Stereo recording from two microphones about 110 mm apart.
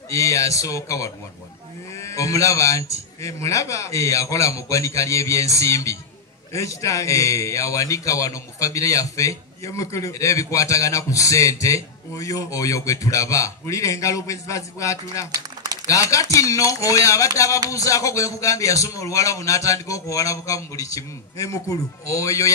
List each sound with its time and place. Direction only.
0.1 s a man's voice: 30° left (ahead or behind)